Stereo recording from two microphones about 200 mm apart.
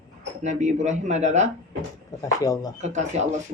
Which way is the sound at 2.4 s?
20° left (ahead or behind).